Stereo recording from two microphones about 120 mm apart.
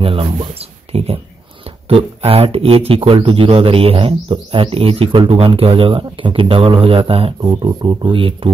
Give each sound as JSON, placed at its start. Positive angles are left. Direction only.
{"t": 0.0, "sound": "speech", "side_deg": -50}
{"t": 7.4, "sound": "speech", "side_deg": -35}